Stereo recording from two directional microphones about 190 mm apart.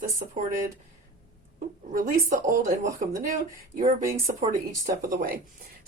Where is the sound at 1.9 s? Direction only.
50° right (ahead or behind).